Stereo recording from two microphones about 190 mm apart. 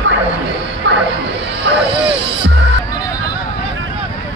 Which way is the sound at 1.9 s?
30° right (ahead or behind).